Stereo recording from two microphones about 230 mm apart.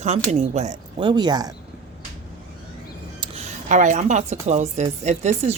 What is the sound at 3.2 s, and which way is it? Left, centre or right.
Speech, right.